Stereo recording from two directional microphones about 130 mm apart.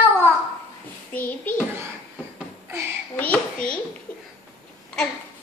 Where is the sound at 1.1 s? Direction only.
15° left (ahead or behind).